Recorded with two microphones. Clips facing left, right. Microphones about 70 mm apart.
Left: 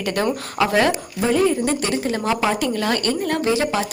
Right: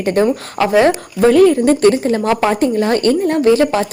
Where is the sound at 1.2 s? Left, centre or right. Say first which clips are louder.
Right 9 dB; right.